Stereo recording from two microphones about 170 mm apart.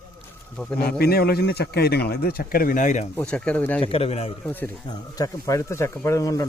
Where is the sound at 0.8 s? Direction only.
65° left (ahead or behind); by 3.0 s 50° left (ahead or behind).